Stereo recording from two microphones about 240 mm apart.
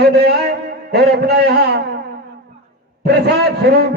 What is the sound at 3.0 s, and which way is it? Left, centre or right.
Speech, right.